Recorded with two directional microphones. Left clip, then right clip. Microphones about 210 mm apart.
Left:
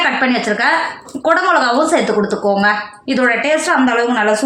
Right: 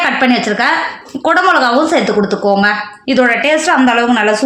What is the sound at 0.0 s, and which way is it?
A woman's voice, 45° right (ahead or behind).